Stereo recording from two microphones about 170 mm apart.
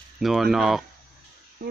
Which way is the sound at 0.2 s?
Centre (ahead or behind).